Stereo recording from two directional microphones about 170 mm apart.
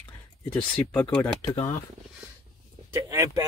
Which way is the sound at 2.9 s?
20° right (ahead or behind).